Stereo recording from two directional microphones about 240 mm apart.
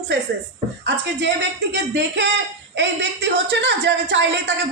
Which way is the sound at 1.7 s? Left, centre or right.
Right.